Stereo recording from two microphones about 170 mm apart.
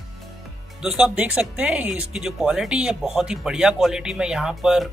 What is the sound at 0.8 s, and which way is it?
Speech, 5° right (ahead or behind).